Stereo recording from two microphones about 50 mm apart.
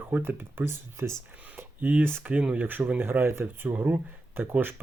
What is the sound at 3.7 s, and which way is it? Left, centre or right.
Speech, right.